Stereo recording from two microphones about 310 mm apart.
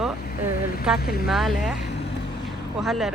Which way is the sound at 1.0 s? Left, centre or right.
Left.